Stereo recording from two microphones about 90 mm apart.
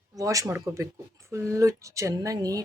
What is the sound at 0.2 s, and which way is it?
Speech, 40° right (ahead or behind).